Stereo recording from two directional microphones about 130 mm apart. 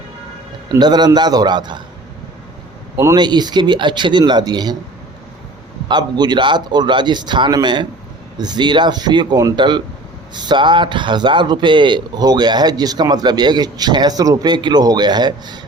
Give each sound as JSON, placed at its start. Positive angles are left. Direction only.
{"t": 0.7, "sound": "a man's voice", "side_deg": -35}
{"t": 3.2, "sound": "a man's voice", "side_deg": -35}
{"t": 5.9, "sound": "a man's voice", "side_deg": -35}